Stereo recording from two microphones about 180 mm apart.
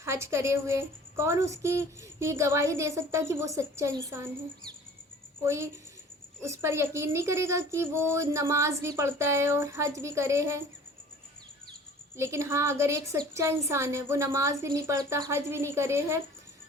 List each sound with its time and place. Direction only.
0.0 s speech: 15° right (ahead or behind)
5.4 s speech: 15° right (ahead or behind)
12.1 s speech: 15° right (ahead or behind)